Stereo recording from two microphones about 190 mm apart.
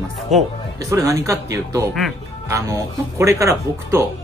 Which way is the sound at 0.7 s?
15° right (ahead or behind).